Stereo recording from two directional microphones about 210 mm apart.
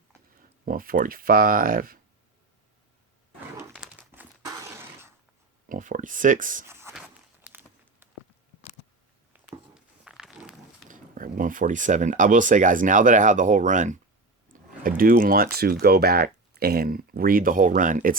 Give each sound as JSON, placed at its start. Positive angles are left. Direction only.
{"t": 0.6, "sound": "speech", "side_deg": -45}
{"t": 3.7, "sound": "crumpling", "side_deg": -5}
{"t": 5.6, "sound": "speech", "side_deg": -40}
{"t": 6.7, "sound": "a sound", "side_deg": -10}
{"t": 9.3, "sound": "a sound", "side_deg": -5}
{"t": 10.8, "sound": "speech", "side_deg": -40}